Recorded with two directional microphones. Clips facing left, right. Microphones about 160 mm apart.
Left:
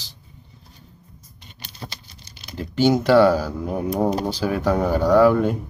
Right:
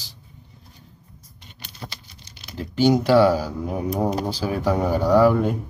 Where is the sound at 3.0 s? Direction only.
10° right (ahead or behind).